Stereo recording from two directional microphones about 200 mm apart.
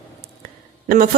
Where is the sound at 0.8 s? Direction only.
45° right (ahead or behind).